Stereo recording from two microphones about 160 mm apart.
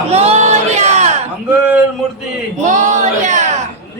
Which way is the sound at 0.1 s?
40° right (ahead or behind).